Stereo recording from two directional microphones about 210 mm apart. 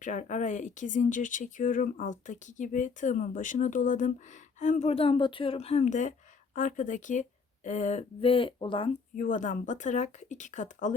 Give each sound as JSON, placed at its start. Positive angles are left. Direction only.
{"t": 0.0, "sound": "speech", "side_deg": 35}
{"t": 9.1, "sound": "speech", "side_deg": 40}